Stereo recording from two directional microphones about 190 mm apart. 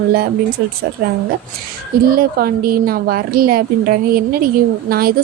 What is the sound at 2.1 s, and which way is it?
Speech, 50° right (ahead or behind).